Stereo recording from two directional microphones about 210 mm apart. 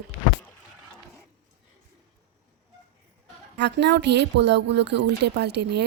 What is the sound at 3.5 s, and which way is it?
Speech, 55° right (ahead or behind).